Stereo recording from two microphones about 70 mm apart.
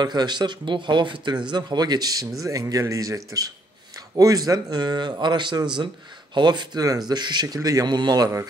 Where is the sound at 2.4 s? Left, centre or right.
Right.